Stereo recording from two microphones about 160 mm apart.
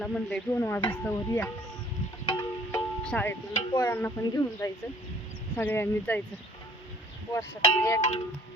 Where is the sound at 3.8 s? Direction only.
15° left (ahead or behind).